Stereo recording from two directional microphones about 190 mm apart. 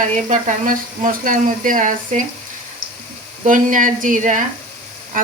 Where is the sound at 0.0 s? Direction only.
40° right (ahead or behind).